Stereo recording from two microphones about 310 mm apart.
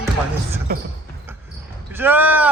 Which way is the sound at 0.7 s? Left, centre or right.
Right.